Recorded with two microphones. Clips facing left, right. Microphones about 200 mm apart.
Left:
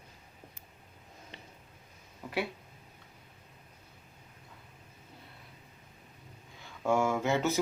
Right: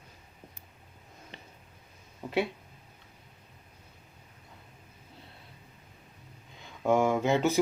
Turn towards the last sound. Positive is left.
turn(degrees=-15)  # may be behind; listen again after turning